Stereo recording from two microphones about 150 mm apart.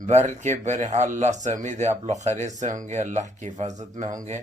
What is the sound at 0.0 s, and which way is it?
A man's voice, 50° right (ahead or behind).